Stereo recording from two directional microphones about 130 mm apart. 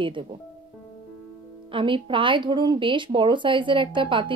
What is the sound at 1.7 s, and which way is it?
Speech, 40° right (ahead or behind).